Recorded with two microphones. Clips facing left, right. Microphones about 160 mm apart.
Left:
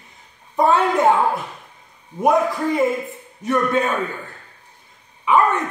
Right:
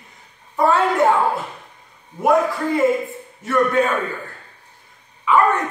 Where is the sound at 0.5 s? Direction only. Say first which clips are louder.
Left 1 dB; 20° left (ahead or behind).